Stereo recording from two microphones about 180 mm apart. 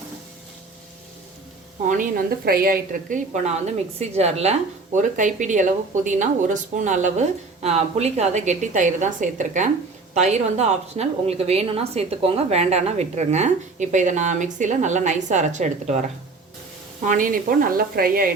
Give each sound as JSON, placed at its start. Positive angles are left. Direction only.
{"t": 1.9, "sound": "a woman's voice", "side_deg": -50}